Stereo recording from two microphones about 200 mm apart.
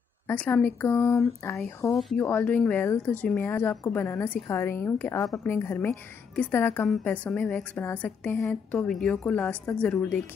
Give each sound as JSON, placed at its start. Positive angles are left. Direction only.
{"t": 0.3, "sound": "a woman's voice", "side_deg": 10}